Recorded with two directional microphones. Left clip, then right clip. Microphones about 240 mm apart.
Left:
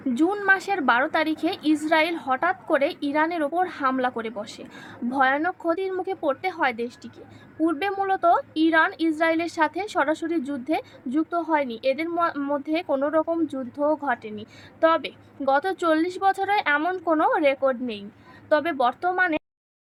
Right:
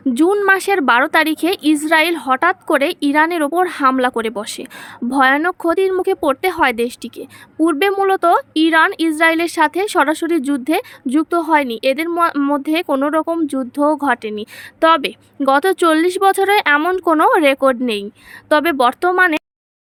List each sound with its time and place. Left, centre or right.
0.1 s a woman's voice: right